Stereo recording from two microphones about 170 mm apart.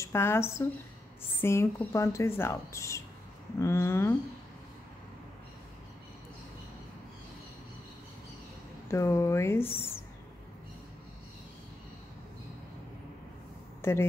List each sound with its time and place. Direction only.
0.0 s speech: 15° left (ahead or behind)
8.8 s speech: 15° left (ahead or behind)
13.7 s a sound: 15° left (ahead or behind)